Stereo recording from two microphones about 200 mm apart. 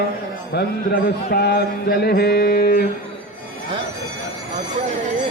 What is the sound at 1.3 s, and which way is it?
Mantra, 55° left (ahead or behind).